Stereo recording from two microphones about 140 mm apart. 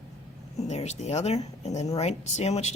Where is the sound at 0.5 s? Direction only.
50° left (ahead or behind).